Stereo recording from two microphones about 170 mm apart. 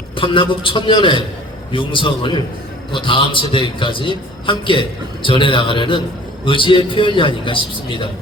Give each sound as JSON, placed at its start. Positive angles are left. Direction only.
{"t": 0.2, "sound": "a man's voice", "side_deg": 30}